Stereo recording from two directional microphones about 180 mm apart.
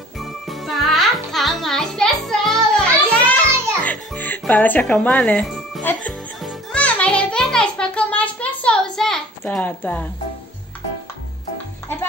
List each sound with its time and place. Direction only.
0.2 s music: centre (ahead or behind)